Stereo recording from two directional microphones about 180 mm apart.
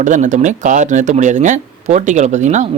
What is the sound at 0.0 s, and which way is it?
A man's voice, 45° right (ahead or behind).